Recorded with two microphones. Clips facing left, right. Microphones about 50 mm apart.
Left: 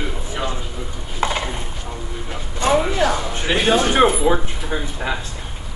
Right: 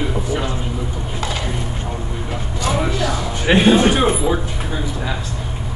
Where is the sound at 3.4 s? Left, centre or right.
Right.